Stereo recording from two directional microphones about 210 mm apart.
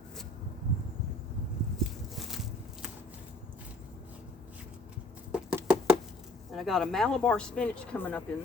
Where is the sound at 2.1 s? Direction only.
Centre (ahead or behind).